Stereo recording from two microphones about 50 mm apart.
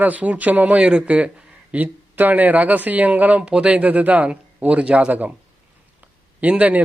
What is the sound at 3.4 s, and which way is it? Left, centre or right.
Speech, right.